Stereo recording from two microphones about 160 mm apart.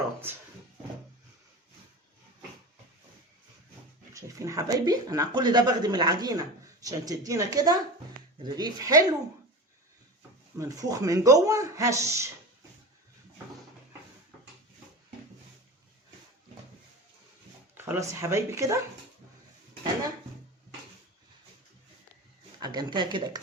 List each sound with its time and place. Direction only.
4.1 s speech: 20° right (ahead or behind)
10.6 s speech: 20° right (ahead or behind)
17.7 s speech: 15° right (ahead or behind)
22.6 s speech: 25° right (ahead or behind)